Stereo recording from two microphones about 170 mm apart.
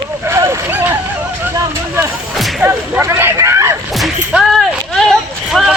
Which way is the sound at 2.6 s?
15° right (ahead or behind).